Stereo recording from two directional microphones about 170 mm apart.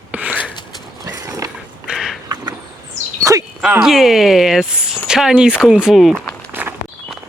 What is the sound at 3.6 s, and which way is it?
Speech, 5° right (ahead or behind).